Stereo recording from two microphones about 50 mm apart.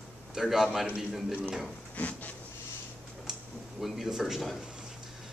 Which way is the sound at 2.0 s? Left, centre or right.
Left.